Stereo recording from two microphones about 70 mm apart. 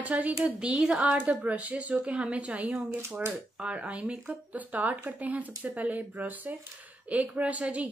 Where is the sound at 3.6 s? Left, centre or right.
Centre.